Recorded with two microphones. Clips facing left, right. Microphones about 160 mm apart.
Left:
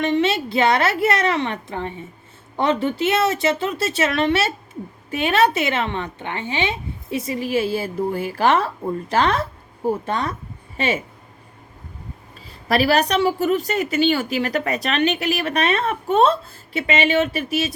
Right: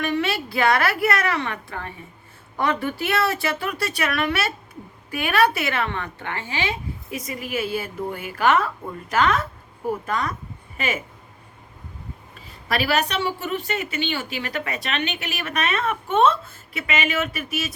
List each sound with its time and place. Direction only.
0.0 s a woman's voice: 20° left (ahead or behind)
12.6 s a woman's voice: 35° left (ahead or behind)